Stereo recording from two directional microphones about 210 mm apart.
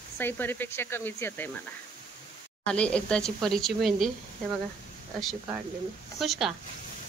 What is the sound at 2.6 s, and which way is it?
Speech, 5° left (ahead or behind).